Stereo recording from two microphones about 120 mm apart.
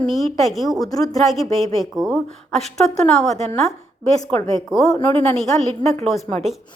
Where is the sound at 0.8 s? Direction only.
30° left (ahead or behind).